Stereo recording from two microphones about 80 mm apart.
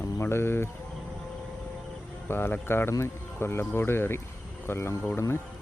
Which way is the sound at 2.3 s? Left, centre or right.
Left.